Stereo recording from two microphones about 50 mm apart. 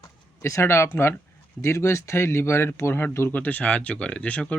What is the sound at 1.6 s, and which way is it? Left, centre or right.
Speech, left.